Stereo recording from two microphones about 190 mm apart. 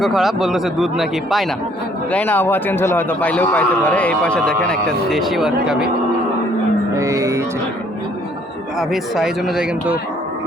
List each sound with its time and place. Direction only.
0.0 s a man's voice: centre (ahead or behind)
6.9 s music: 15° right (ahead or behind)
8.8 s speech: centre (ahead or behind)